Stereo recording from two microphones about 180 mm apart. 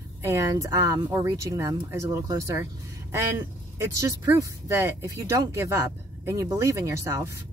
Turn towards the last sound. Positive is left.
turn(degrees=-15)  # may be behind; listen again after turning